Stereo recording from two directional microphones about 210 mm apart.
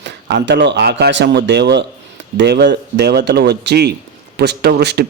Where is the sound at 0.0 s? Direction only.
55° right (ahead or behind).